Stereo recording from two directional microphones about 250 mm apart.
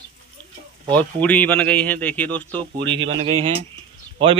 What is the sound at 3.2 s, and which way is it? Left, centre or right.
Speech, right.